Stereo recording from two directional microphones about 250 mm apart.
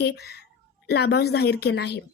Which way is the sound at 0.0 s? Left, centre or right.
Left.